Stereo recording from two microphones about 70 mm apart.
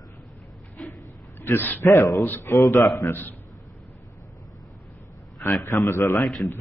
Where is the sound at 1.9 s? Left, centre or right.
Left.